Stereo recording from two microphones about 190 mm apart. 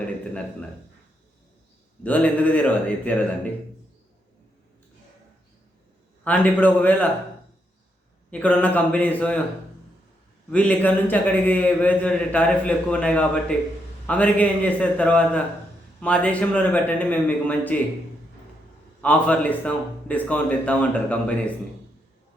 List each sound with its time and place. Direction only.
2.0 s a man's voice: 5° left (ahead or behind)
6.2 s a man's voice: 10° left (ahead or behind)
8.3 s a man's voice: 10° left (ahead or behind)
10.5 s a man's voice: 5° left (ahead or behind)
19.0 s a man's voice: 5° left (ahead or behind)